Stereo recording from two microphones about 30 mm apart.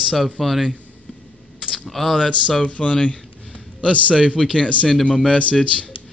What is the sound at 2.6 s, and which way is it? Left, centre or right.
Speech, left.